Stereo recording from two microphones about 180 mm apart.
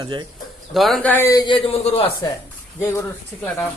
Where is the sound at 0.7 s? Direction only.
Centre (ahead or behind).